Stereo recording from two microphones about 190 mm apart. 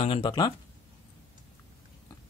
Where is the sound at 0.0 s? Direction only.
25° left (ahead or behind).